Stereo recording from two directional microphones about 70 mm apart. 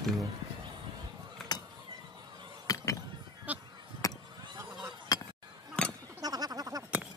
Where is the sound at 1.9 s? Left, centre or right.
Right.